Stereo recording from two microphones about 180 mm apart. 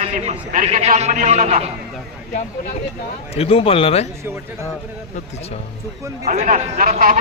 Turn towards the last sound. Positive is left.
turn(degrees=-50)  # may be behind; listen again after turning